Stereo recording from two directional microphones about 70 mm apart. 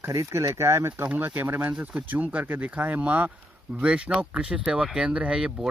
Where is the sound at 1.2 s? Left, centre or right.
Right.